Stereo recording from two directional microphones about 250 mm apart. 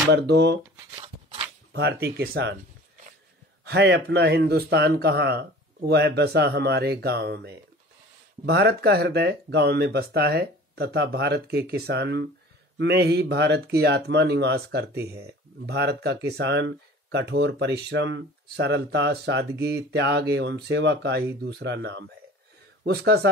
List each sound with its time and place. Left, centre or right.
0.1 s speech: right
0.9 s a sound: right
1.7 s a man's voice: right
3.6 s a man's voice: right
15.0 s speech: centre
15.6 s a man's voice: right